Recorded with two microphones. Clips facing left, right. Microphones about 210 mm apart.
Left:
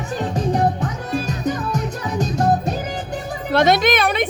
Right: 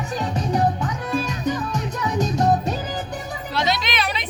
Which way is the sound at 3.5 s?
55° left (ahead or behind).